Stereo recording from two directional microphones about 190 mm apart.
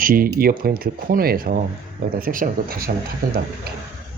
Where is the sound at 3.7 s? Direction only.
55° right (ahead or behind).